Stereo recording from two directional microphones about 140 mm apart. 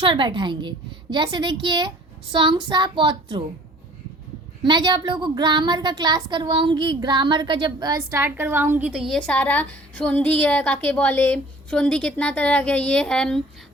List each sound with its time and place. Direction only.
0.0 s a woman's voice: 35° right (ahead or behind)
4.6 s a woman's voice: 35° right (ahead or behind)
8.1 s a woman's voice: 15° right (ahead or behind)
8.9 s a woman's voice: 5° right (ahead or behind)
9.2 s a woman's voice: 10° left (ahead or behind)